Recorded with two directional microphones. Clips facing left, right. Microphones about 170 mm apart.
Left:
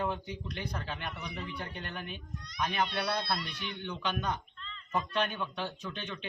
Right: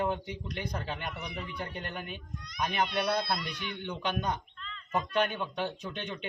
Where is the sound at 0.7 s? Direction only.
20° right (ahead or behind).